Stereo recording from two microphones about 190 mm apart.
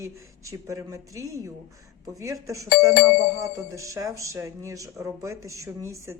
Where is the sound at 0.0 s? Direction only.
15° right (ahead or behind).